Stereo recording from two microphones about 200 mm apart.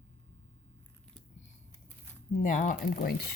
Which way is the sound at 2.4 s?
40° left (ahead or behind).